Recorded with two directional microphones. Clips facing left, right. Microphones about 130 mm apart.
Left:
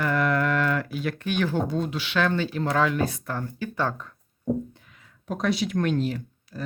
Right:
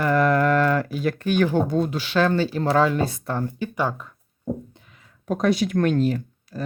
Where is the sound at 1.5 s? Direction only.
45° right (ahead or behind); by 3.7 s 30° right (ahead or behind).